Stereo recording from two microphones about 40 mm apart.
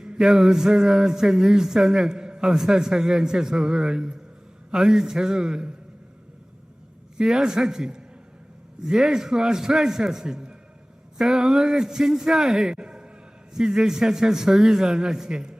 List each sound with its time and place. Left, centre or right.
0.0 s speech: centre
7.2 s speech: centre